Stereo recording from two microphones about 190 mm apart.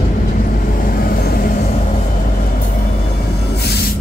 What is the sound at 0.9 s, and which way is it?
Vehicle, 50° left (ahead or behind).